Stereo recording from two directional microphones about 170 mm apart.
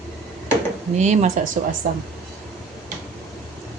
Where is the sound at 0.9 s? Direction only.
40° right (ahead or behind).